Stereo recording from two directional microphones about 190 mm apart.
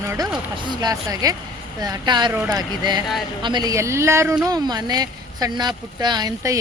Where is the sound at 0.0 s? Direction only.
15° right (ahead or behind).